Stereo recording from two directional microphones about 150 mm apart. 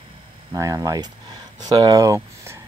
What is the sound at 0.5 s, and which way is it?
Speech, 20° right (ahead or behind).